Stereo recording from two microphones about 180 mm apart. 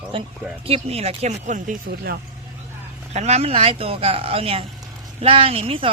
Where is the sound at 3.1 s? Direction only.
40° right (ahead or behind).